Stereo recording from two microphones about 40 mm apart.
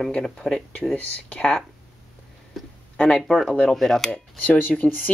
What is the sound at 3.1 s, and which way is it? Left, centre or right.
Speech, centre.